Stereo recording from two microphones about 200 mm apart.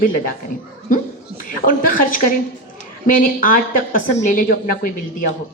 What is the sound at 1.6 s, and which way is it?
Speech, 45° left (ahead or behind).